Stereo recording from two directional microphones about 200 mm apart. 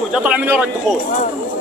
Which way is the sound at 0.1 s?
5° right (ahead or behind).